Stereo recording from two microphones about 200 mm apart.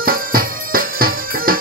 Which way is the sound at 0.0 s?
45° right (ahead or behind).